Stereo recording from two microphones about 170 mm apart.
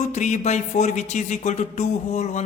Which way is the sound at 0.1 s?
45° left (ahead or behind).